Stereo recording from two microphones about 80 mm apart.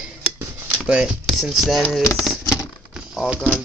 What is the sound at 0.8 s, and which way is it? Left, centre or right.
Speech, centre.